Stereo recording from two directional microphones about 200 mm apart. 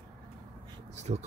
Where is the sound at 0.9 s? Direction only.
35° right (ahead or behind).